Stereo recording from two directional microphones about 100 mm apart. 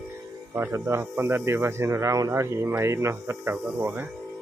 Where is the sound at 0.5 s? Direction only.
25° right (ahead or behind).